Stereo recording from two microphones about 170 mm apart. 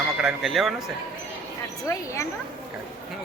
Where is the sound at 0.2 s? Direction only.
5° right (ahead or behind).